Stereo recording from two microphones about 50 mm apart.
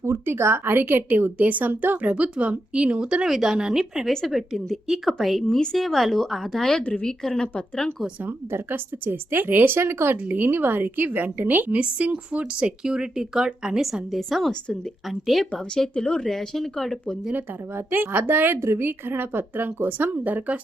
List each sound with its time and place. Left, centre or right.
0.0 s speech: right; by 4.0 s centre
4.3 s speech: centre
8.2 s speech: right
10.3 s a woman's voice: right
11.8 s speech: right
14.1 s speech: centre
15.8 s speech: centre
17.3 s speech: right
18.6 s speech: right